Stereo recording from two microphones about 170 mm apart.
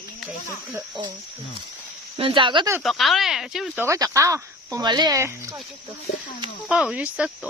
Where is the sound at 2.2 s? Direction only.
30° right (ahead or behind).